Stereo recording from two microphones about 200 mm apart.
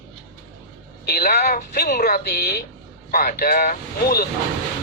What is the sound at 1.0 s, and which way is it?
Speech, 50° left (ahead or behind).